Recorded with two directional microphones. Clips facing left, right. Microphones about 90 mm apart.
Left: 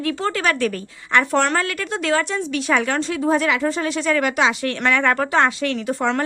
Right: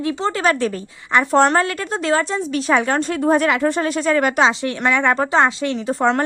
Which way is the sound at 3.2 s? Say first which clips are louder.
Right 3 dB; 45° right (ahead or behind).